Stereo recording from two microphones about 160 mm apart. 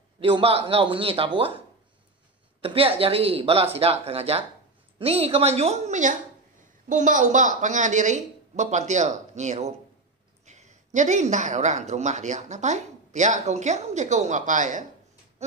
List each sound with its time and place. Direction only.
0.2 s speech: 35° right (ahead or behind)
2.6 s speech: 35° right (ahead or behind); by 14.9 s 50° right (ahead or behind)